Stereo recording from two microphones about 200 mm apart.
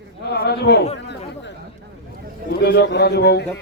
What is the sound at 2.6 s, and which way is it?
Speech, 55° left (ahead or behind).